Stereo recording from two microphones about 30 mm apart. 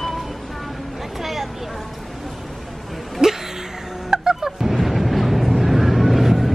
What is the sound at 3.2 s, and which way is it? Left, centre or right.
Music, centre.